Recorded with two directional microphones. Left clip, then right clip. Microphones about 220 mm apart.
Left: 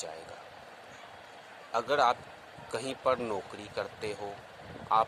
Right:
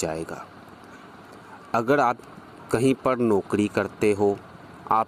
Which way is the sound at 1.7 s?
40° right (ahead or behind).